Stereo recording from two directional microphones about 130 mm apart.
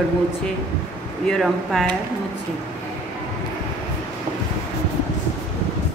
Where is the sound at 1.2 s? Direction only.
Centre (ahead or behind).